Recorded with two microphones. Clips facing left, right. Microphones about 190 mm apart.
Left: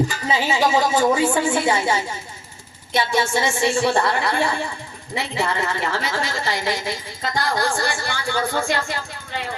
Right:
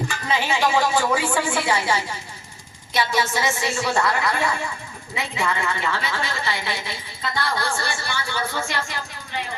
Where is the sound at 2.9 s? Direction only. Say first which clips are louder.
Left 2 dB; 25° left (ahead or behind); by 8.6 s 50° left (ahead or behind).